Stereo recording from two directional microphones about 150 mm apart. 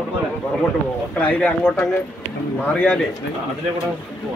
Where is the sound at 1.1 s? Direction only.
10° left (ahead or behind).